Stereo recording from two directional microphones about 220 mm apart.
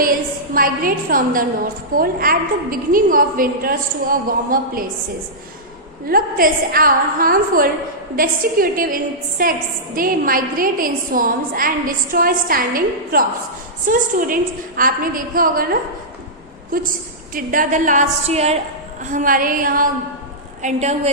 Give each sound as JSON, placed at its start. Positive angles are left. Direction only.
{"t": 0.5, "sound": "a woman's voice", "side_deg": -40}
{"t": 6.1, "sound": "a woman's voice", "side_deg": -40}